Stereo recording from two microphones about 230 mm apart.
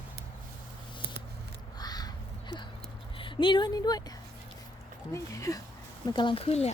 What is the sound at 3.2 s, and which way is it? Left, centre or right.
Speech, left.